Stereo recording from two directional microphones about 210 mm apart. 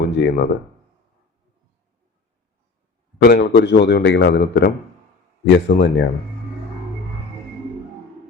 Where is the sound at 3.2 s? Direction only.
50° left (ahead or behind).